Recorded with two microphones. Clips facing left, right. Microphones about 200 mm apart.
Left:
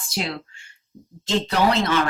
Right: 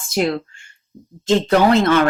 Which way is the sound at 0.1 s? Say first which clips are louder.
Right 9 dB; 50° right (ahead or behind).